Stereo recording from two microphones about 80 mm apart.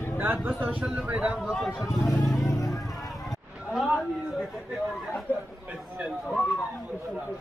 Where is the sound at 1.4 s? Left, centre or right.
Centre.